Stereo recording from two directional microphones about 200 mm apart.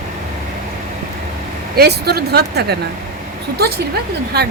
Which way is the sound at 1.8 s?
50° right (ahead or behind).